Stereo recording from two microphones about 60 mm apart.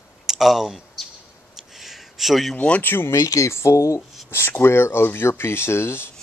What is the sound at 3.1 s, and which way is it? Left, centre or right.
Speech, left.